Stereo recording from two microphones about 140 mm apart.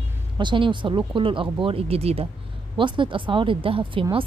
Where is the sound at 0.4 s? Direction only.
35° right (ahead or behind).